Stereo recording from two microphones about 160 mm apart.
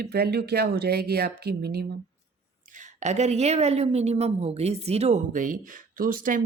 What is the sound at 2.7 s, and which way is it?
A woman's voice, 50° right (ahead or behind).